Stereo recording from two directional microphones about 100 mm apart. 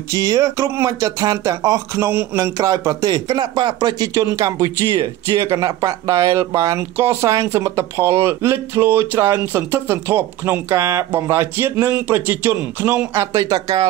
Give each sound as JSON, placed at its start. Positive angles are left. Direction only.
{"t": 0.1, "sound": "speech", "side_deg": -35}
{"t": 4.1, "sound": "speech", "side_deg": -30}
{"t": 5.5, "sound": "speech", "side_deg": -35}